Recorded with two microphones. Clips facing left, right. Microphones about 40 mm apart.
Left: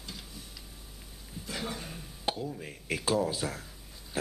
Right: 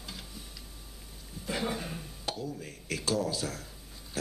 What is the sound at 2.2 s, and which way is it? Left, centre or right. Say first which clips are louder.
Speech: left 4 dB; left.